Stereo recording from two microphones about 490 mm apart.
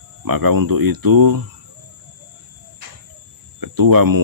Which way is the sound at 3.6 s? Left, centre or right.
Right.